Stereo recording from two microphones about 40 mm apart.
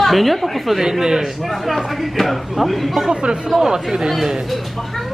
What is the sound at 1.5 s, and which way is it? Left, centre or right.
Speech, centre.